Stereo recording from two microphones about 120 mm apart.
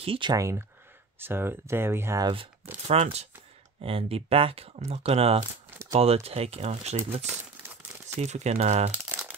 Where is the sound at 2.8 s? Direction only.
60° right (ahead or behind).